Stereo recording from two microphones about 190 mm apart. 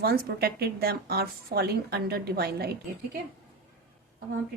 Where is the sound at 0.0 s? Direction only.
55° right (ahead or behind).